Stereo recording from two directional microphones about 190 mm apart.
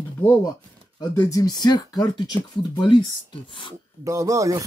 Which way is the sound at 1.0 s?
15° left (ahead or behind).